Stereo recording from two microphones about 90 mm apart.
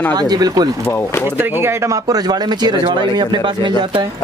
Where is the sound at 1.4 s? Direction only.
25° right (ahead or behind); by 4.0 s 60° right (ahead or behind).